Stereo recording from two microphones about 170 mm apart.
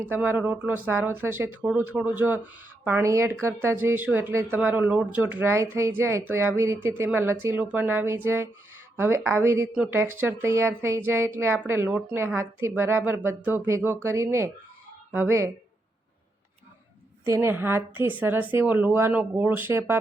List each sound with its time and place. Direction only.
0.0 s a woman's voice: 10° right (ahead or behind)
17.2 s a woman's voice: 15° right (ahead or behind)